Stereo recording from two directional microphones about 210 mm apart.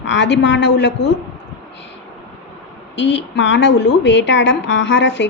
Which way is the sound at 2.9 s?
55° left (ahead or behind).